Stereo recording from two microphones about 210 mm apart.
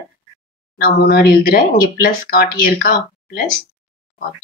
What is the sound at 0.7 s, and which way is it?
Speech, 45° left (ahead or behind).